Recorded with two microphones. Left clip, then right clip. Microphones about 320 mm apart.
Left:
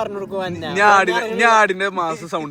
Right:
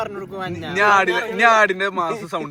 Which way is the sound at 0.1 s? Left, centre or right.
Left.